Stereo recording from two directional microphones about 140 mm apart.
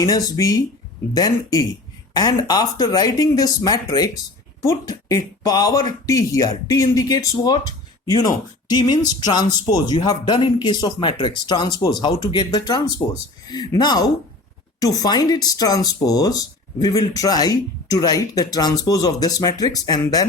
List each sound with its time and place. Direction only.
0.0 s speech: 25° left (ahead or behind)
8.7 s speech: 30° left (ahead or behind)